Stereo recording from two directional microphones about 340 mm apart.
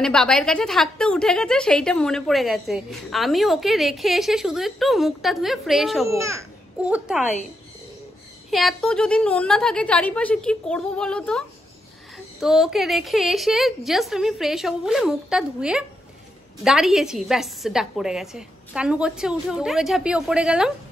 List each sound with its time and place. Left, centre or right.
0.0 s a woman's voice: centre
8.5 s a woman's voice: centre